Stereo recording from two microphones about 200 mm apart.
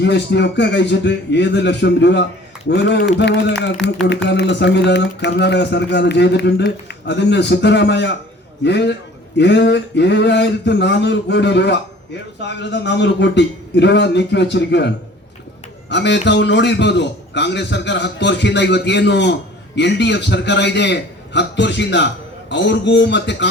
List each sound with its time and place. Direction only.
0.0 s a man's voice: 60° left (ahead or behind)